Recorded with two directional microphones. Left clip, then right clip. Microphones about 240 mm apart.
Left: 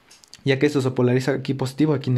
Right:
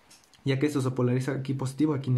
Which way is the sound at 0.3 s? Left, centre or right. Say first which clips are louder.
Left 8 dB; left.